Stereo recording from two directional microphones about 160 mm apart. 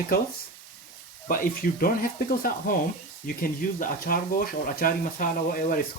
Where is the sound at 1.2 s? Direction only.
65° left (ahead or behind).